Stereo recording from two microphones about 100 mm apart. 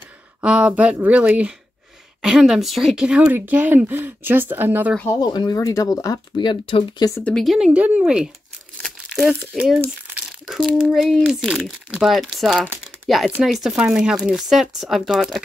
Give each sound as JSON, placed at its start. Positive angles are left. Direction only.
{"t": 0.4, "sound": "speech", "side_deg": -10}
{"t": 5.2, "sound": "speech", "side_deg": 40}
{"t": 7.2, "sound": "speech", "side_deg": 5}
{"t": 7.5, "sound": "speech", "side_deg": -10}
{"t": 8.8, "sound": "crumpling", "side_deg": 0}
{"t": 9.5, "sound": "speech", "side_deg": -10}